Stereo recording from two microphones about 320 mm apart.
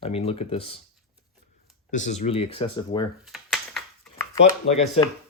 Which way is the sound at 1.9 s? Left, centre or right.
Left.